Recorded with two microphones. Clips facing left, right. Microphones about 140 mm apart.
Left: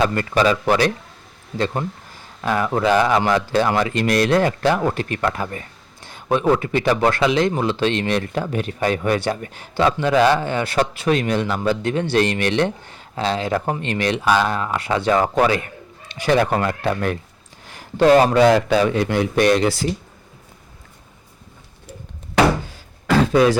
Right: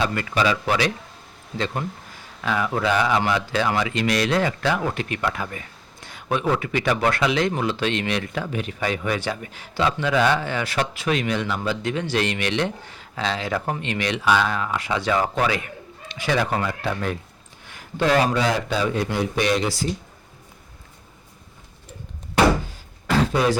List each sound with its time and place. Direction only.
0.0 s speech: 40° left (ahead or behind)
10.4 s speech: 25° left (ahead or behind)
10.8 s speech: 35° left (ahead or behind)
13.1 s speech: 35° left (ahead or behind); by 17.2 s 60° left (ahead or behind)
17.7 s a sound: 35° left (ahead or behind)
18.3 s a man's voice: 65° left (ahead or behind); by 19.3 s 85° left
19.4 s speech: 50° left (ahead or behind)